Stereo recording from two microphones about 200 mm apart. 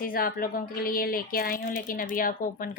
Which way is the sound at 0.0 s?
45° left (ahead or behind).